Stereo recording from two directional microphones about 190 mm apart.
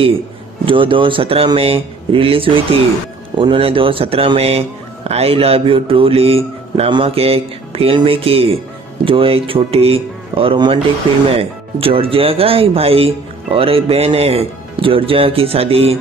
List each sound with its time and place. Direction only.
0.7 s speech: 25° right (ahead or behind)